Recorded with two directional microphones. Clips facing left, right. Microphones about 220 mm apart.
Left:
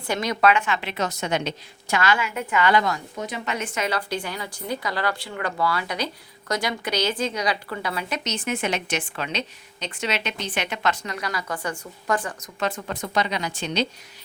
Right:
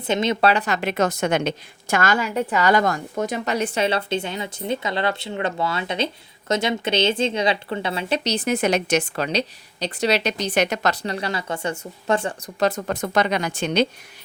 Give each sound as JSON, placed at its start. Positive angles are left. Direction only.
{"t": 0.1, "sound": "speech", "side_deg": -25}
{"t": 0.5, "sound": "a woman's voice", "side_deg": -40}